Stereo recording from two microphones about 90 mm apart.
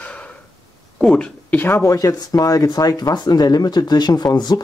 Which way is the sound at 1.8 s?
40° left (ahead or behind).